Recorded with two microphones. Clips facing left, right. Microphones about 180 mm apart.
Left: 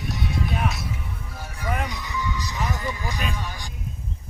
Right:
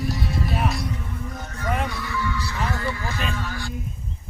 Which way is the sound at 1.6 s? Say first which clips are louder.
Right 2 dB; 10° left (ahead or behind).